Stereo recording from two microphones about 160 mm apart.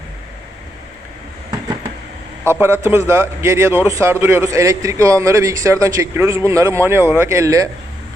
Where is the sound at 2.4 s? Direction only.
15° right (ahead or behind).